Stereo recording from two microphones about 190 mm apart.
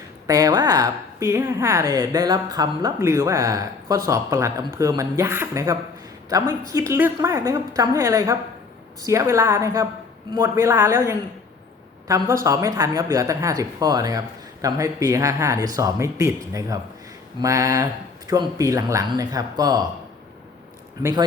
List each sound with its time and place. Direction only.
0.3 s a woman's voice: 20° right (ahead or behind)
21.0 s speech: 20° right (ahead or behind)